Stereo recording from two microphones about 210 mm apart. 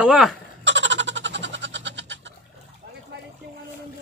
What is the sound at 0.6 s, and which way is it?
Cat, 60° right (ahead or behind).